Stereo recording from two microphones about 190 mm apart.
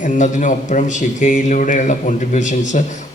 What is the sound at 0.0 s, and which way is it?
Speech, 40° left (ahead or behind).